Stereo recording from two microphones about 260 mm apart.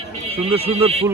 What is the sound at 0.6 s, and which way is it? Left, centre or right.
Speech, right.